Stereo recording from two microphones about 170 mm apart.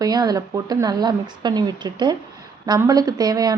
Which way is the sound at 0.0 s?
20° right (ahead or behind).